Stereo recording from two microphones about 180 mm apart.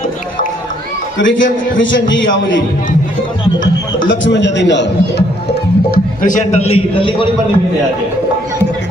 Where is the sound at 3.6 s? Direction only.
90° left; by 7.3 s 30° left (ahead or behind).